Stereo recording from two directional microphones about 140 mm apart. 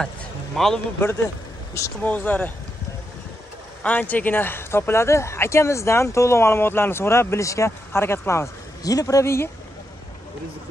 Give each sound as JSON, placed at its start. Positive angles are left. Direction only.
{"t": 0.0, "sound": "a man's voice", "side_deg": 5}
{"t": 1.7, "sound": "speech", "side_deg": 15}
{"t": 3.8, "sound": "speech", "side_deg": 10}